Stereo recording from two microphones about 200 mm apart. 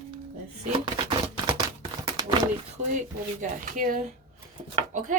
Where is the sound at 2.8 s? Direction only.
40° right (ahead or behind).